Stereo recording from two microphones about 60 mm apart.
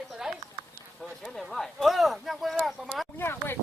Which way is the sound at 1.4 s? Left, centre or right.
Centre.